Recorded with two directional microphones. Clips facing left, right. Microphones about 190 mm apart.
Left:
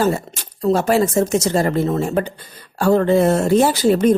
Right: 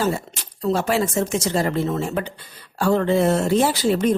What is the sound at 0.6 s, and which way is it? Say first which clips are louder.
Speech: left 5 dB; 40° left (ahead or behind).